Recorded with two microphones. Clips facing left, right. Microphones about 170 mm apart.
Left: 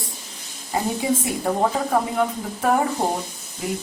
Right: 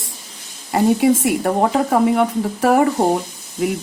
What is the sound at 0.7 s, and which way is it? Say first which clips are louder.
Speech: right 8 dB; 75° right (ahead or behind).